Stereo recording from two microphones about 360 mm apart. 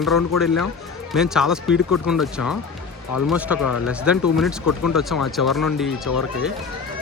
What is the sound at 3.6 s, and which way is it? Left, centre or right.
Speech, left.